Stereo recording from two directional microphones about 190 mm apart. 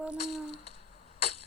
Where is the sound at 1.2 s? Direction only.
30° left (ahead or behind).